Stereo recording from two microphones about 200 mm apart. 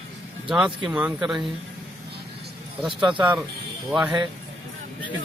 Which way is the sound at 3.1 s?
5° right (ahead or behind).